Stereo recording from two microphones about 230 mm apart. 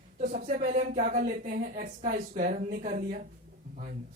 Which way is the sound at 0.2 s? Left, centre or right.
Right.